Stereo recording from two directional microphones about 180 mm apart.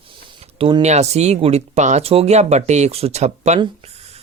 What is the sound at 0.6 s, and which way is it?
Speech, 35° right (ahead or behind).